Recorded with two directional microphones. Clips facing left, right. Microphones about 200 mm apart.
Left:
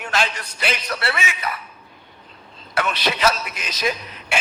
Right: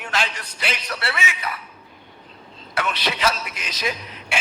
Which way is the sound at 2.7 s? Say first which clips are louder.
Left 2 dB; 45° left (ahead or behind).